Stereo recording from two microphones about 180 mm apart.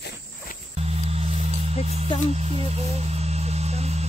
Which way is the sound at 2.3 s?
35° right (ahead or behind).